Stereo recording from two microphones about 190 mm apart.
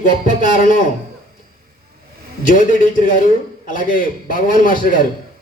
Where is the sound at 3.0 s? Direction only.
45° left (ahead or behind).